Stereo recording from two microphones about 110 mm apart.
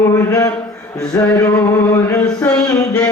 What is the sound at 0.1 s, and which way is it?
Speech, 30° left (ahead or behind).